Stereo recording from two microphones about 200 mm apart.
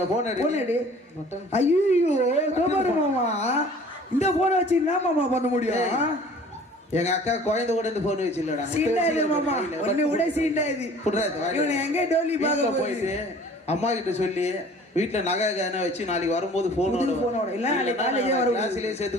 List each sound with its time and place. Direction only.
0.2 s a man's voice: 35° left (ahead or behind)
1.9 s a man's voice: 35° left (ahead or behind)